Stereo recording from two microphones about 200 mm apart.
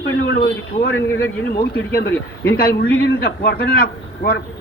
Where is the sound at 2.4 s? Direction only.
50° left (ahead or behind).